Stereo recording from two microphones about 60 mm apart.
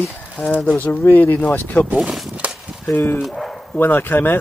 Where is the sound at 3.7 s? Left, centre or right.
Left.